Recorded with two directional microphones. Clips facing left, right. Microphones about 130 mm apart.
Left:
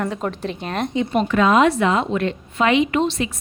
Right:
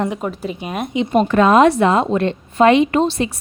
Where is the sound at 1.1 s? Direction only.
40° right (ahead or behind).